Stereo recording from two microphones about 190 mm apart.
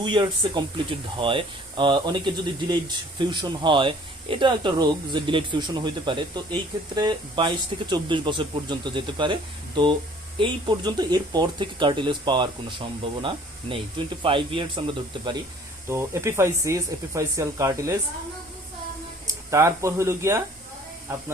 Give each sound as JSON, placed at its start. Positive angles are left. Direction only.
{"t": 0.0, "sound": "speech", "side_deg": -25}
{"t": 15.9, "sound": "speech", "side_deg": -15}
{"t": 19.3, "sound": "speech", "side_deg": -15}